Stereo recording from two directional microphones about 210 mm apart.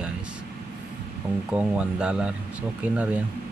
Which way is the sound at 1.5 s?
5° right (ahead or behind).